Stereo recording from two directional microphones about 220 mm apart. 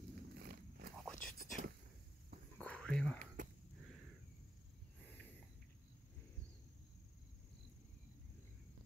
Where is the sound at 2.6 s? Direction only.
5° left (ahead or behind).